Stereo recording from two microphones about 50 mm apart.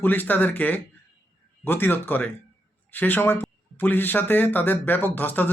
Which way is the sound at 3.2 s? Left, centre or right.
Left.